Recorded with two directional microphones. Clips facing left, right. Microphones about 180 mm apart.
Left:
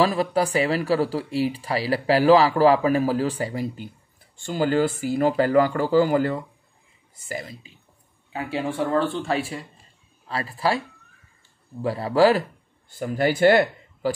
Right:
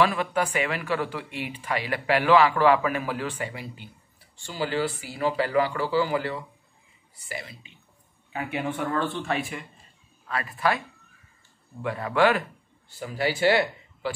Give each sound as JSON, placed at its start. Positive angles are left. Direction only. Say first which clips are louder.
{"t": 0.0, "sound": "speech", "louder": "left 3 dB", "side_deg": 35}
{"t": 8.3, "sound": "speech", "louder": "left 3 dB", "side_deg": 30}
{"t": 11.8, "sound": "speech", "louder": "left 4 dB", "side_deg": 35}
{"t": 12.9, "sound": "speech", "louder": "left 5 dB", "side_deg": 50}